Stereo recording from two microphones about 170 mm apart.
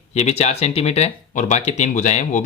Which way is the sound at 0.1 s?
40° left (ahead or behind).